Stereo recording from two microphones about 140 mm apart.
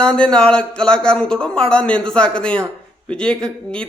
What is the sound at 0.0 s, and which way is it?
A man's voice, 5° left (ahead or behind).